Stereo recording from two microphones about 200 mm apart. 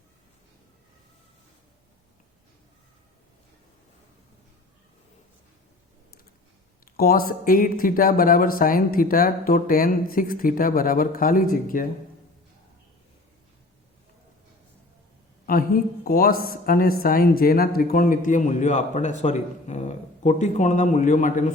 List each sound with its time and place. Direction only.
6.9 s speech: 45° left (ahead or behind)
15.4 s a woman's voice: 45° left (ahead or behind)